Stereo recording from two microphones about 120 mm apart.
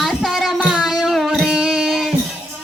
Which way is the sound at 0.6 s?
5° right (ahead or behind).